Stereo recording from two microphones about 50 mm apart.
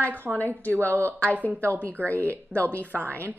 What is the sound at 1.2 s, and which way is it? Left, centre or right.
A woman's voice, left.